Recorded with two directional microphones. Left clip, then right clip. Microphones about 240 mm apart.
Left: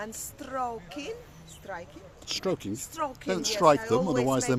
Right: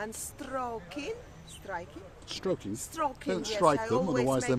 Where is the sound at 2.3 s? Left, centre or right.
Left.